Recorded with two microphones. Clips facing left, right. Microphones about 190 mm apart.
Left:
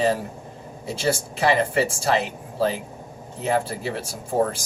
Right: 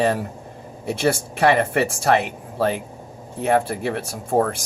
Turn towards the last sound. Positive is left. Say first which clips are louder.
# right 2 dB
turn(degrees=-60)  # may be behind; listen again after turning